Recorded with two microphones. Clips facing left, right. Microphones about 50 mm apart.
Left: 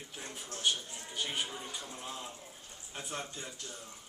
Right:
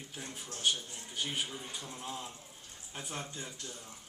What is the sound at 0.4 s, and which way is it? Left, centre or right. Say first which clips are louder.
Speech: even; left.